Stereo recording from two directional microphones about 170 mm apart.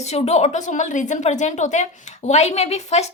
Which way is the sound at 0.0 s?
40° left (ahead or behind).